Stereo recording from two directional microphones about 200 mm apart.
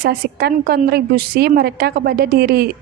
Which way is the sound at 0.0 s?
50° right (ahead or behind).